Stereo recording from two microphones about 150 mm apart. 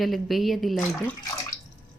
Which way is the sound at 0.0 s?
Centre (ahead or behind).